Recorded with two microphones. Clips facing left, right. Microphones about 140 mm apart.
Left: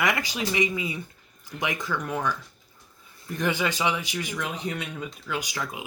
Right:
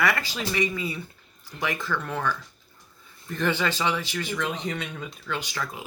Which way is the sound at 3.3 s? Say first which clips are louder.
Right 1 dB; 15° left (ahead or behind).